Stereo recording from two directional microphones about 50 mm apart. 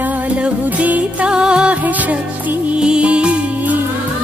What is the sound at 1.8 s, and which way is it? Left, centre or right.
Music, right.